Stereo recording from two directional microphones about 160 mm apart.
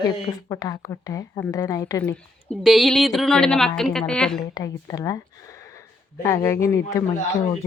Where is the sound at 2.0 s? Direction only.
10° left (ahead or behind).